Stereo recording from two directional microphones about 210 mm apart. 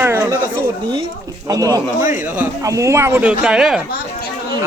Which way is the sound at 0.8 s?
20° right (ahead or behind).